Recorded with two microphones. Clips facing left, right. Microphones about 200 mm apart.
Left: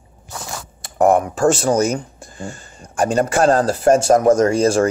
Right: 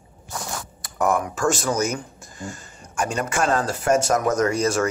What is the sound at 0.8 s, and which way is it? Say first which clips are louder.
Speech: left 8 dB; 30° left (ahead or behind).